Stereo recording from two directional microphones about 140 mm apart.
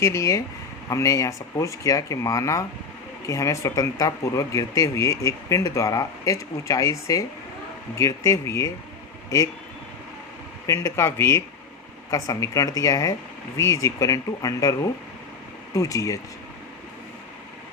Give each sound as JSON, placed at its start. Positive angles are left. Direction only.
{"t": 0.0, "sound": "speech", "side_deg": 20}
{"t": 10.7, "sound": "speech", "side_deg": 20}